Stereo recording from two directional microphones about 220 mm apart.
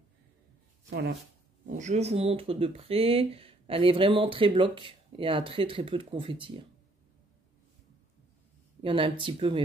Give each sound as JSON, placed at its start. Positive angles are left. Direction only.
{"t": 0.8, "sound": "speech", "side_deg": -50}
{"t": 1.7, "sound": "speech", "side_deg": -35}
{"t": 8.8, "sound": "speech", "side_deg": -25}